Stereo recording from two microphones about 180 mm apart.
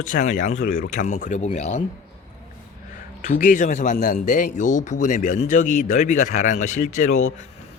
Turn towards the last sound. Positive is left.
turn(degrees=40)  # may be behind; listen again after turning